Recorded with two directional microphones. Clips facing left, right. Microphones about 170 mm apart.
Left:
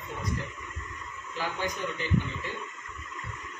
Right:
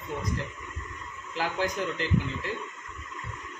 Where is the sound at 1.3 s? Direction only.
90° right.